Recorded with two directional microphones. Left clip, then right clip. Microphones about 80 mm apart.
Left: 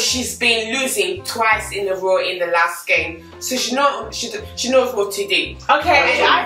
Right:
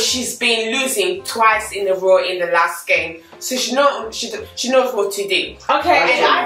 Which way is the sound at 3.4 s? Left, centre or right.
Centre.